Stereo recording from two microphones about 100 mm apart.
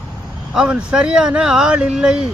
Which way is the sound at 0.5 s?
10° right (ahead or behind).